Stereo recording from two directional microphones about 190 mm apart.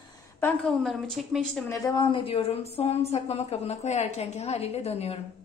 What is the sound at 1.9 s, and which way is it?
Speech, 25° left (ahead or behind).